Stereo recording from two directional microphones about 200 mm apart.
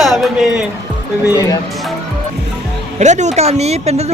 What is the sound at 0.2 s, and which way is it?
Music, centre (ahead or behind).